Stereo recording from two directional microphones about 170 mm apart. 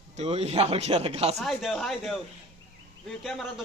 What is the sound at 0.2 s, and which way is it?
Speech, 40° right (ahead or behind).